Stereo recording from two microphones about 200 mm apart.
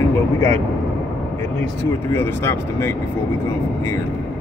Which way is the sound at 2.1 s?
10° left (ahead or behind).